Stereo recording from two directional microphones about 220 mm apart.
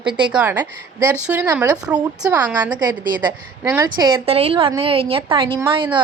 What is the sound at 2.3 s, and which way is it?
A woman's voice, 15° right (ahead or behind).